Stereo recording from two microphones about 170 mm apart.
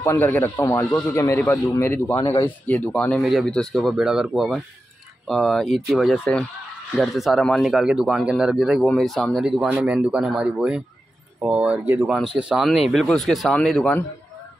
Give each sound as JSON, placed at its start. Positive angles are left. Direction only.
{"t": 0.0, "sound": "a man's voice", "side_deg": 15}